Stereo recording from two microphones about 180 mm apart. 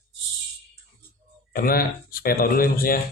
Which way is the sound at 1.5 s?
55° left (ahead or behind).